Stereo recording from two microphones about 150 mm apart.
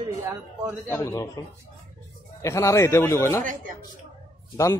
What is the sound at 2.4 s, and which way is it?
Speech, 20° left (ahead or behind).